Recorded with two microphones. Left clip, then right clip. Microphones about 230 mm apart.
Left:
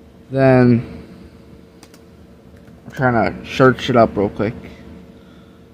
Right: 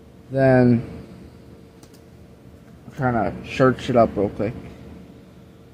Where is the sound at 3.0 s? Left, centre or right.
Left.